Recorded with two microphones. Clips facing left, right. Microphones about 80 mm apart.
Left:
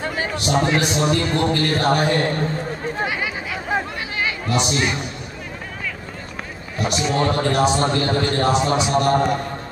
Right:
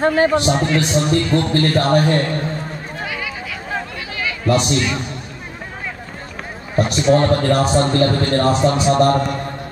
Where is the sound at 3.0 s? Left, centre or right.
Left.